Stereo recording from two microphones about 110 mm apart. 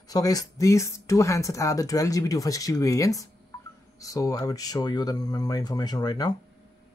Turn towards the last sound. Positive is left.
turn(degrees=35)  # may be behind; listen again after turning